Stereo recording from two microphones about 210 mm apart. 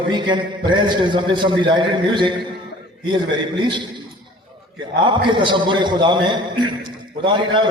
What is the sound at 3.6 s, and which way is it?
Speech, 20° right (ahead or behind).